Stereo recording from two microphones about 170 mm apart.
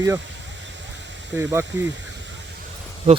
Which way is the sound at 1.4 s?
15° right (ahead or behind).